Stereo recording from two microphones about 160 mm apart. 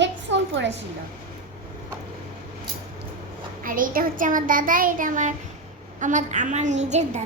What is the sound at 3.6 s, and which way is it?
A child's voice, 60° right (ahead or behind).